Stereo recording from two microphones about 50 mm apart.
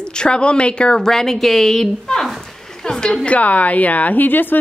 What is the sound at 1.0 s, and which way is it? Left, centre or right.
A woman's voice, centre.